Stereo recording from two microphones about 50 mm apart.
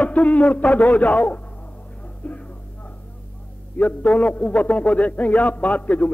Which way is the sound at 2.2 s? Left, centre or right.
Left.